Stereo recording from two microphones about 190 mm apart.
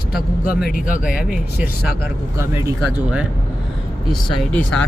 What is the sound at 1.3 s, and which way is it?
Speech, 10° right (ahead or behind).